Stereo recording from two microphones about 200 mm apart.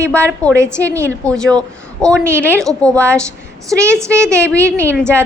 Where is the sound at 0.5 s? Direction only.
15° right (ahead or behind).